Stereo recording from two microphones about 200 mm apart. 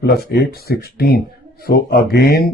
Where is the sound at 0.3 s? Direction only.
55° left (ahead or behind).